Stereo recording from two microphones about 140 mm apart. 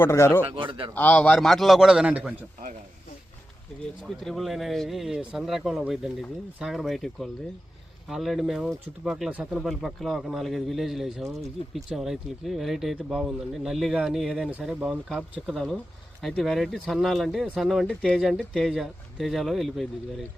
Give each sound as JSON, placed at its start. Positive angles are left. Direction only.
{"t": 0.0, "sound": "speech", "side_deg": 20}
{"t": 0.4, "sound": "speech", "side_deg": -35}
{"t": 0.9, "sound": "speech", "side_deg": 10}
{"t": 4.0, "sound": "speech", "side_deg": 0}